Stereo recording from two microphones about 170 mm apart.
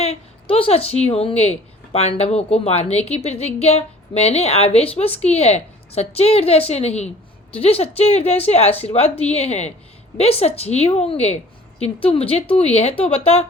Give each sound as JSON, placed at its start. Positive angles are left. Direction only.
{"t": 0.0, "sound": "speech", "side_deg": 35}